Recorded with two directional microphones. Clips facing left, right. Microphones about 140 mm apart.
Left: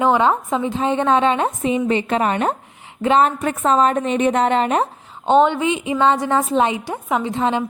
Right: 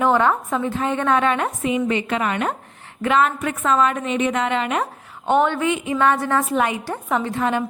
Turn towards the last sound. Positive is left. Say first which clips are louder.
# left 2 dB
turn(degrees=20)  # may be behind; listen again after turning